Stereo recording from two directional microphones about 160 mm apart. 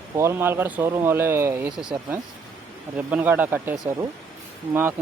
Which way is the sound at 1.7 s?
5° right (ahead or behind).